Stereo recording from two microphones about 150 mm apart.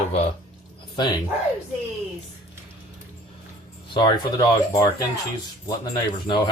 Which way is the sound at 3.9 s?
30° left (ahead or behind).